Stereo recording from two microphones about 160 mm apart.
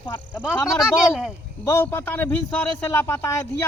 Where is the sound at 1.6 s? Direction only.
15° left (ahead or behind).